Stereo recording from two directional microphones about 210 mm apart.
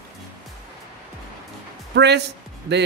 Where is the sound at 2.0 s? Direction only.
55° right (ahead or behind).